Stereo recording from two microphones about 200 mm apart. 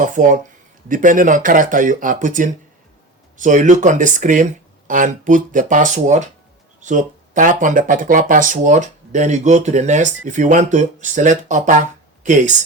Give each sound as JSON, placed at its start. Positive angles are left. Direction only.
{"t": 0.0, "sound": "speech", "side_deg": -40}